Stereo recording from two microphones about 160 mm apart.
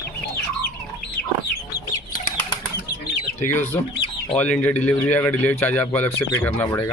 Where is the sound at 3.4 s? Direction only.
15° left (ahead or behind).